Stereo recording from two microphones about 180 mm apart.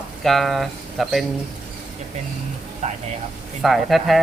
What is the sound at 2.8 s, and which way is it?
Speech, 40° right (ahead or behind).